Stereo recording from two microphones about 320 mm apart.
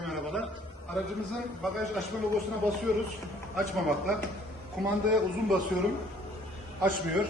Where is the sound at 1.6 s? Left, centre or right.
Centre.